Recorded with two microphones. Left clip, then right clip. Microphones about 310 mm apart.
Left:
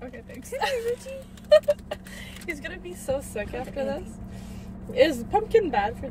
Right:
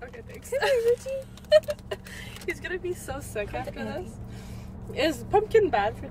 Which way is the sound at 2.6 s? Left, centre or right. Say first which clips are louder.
Right 5 dB; centre.